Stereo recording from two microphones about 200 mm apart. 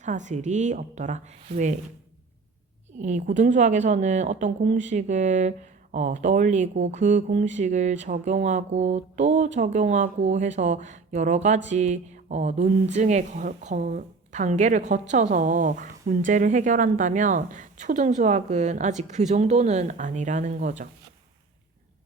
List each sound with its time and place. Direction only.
0.0 s a woman's voice: 35° right (ahead or behind)
3.0 s a woman's voice: 35° right (ahead or behind)